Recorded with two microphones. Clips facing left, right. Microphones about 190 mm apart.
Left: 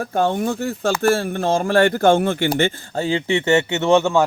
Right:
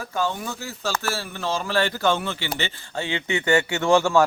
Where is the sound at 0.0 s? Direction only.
55° left (ahead or behind).